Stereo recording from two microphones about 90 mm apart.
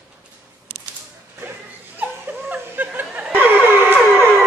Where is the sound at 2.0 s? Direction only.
20° right (ahead or behind).